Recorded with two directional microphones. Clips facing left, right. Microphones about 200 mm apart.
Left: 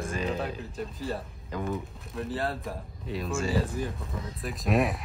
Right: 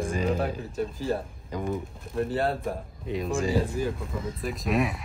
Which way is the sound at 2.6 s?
55° right (ahead or behind).